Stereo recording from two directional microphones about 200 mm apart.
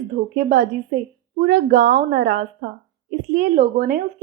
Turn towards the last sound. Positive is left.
turn(degrees=-45)  # may be behind; listen again after turning